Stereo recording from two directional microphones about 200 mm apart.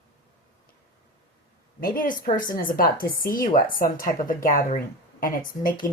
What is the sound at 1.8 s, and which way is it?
Speech, 45° left (ahead or behind).